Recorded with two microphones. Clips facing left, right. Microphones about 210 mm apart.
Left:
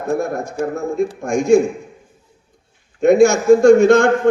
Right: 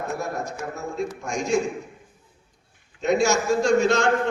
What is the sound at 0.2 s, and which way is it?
A man's voice, 55° left (ahead or behind).